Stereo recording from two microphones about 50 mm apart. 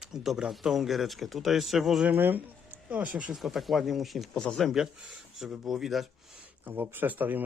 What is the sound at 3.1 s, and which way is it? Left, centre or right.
Speech, right.